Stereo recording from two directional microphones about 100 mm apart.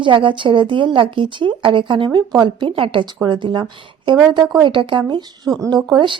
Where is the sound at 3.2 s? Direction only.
50° right (ahead or behind).